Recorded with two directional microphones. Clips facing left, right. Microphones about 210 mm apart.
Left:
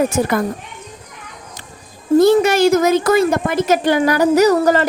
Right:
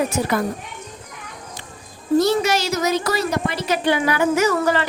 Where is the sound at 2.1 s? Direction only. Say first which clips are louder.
Left 6 dB; 50° left (ahead or behind).